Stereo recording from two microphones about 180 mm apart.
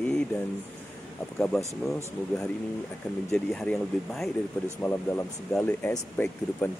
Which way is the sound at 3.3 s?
5° left (ahead or behind).